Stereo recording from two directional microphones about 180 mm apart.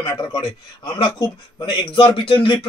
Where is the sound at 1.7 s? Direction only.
25° left (ahead or behind).